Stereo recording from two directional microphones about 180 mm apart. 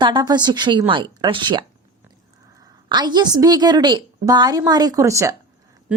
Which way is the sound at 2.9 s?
25° right (ahead or behind).